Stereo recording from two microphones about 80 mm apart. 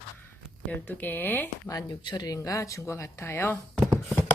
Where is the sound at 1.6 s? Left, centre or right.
Left.